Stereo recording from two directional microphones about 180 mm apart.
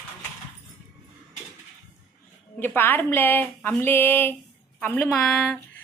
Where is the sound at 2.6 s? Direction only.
10° left (ahead or behind).